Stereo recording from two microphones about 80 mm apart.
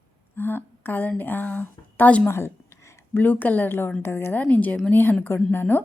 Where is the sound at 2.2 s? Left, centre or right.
Left.